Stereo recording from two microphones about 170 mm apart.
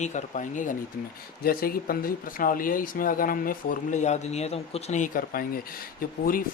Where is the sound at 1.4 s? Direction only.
60° left (ahead or behind).